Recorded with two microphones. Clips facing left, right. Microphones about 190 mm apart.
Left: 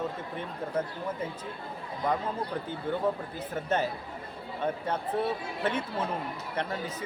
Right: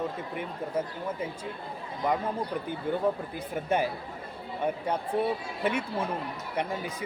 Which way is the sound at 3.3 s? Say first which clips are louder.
Right 1 dB; 10° right (ahead or behind).